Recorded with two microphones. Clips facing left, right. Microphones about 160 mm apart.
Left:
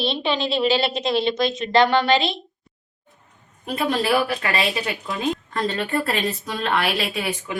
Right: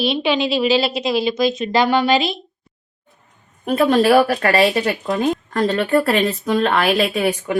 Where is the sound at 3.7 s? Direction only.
55° right (ahead or behind).